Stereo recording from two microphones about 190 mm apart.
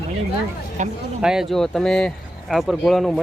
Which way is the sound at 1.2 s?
Centre (ahead or behind).